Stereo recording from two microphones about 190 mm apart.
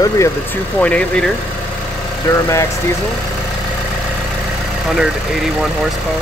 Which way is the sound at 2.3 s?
15° left (ahead or behind).